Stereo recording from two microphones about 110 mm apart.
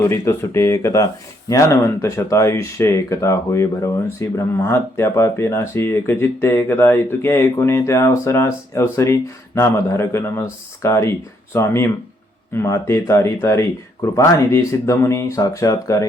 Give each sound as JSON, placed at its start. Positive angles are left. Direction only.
{"t": 0.1, "sound": "speech", "side_deg": 25}